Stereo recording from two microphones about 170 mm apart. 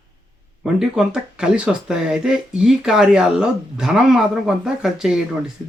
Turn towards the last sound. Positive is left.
turn(degrees=-5)  # may be behind; listen again after turning